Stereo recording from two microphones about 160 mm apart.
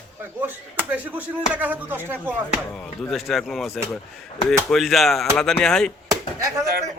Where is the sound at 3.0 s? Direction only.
Centre (ahead or behind).